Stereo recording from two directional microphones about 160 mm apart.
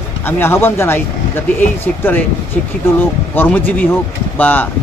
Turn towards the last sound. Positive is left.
turn(degrees=10)  # may be behind; listen again after turning